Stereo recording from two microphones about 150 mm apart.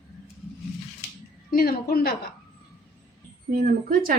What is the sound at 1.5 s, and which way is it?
Speech, 90° left.